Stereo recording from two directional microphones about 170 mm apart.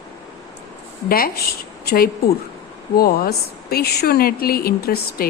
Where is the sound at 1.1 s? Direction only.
60° left (ahead or behind).